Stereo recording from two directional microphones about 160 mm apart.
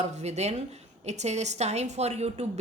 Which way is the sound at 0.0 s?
45° right (ahead or behind).